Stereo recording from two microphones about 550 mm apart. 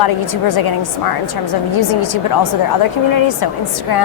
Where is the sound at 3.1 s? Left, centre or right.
Left.